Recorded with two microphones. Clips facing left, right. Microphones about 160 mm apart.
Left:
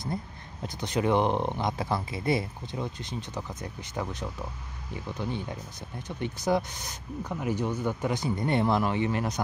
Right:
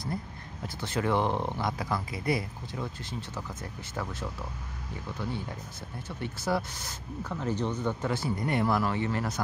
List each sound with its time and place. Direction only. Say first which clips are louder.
0.7 s speech: left 3 dB; 15° left (ahead or behind)
6.0 s speech: left 4 dB; 20° left (ahead or behind)